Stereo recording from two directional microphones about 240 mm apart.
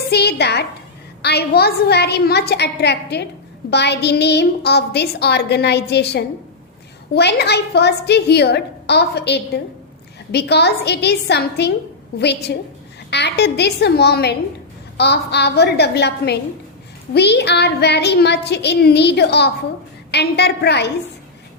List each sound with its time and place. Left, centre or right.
0.1 s a woman's voice: left